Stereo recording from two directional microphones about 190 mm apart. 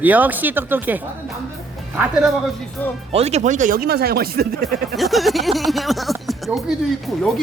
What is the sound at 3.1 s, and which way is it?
Speech, 35° right (ahead or behind).